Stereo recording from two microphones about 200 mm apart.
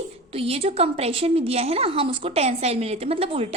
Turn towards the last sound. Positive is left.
turn(degrees=-30)  # may be behind; listen again after turning